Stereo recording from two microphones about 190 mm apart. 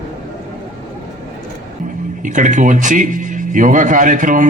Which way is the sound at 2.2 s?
40° right (ahead or behind).